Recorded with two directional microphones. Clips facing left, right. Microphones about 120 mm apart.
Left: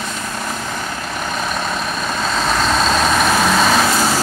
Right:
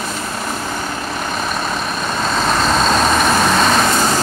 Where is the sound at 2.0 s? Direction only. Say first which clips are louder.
Right 2 dB; centre (ahead or behind).